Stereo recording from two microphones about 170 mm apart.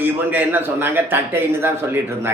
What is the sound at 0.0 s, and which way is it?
A man's voice, 10° right (ahead or behind).